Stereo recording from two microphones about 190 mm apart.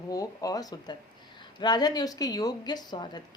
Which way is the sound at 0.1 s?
20° left (ahead or behind).